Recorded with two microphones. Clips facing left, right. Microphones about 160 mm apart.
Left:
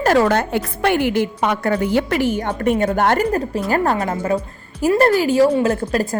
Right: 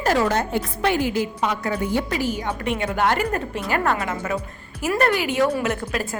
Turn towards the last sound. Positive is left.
turn(degrees=40)  # may be behind; listen again after turning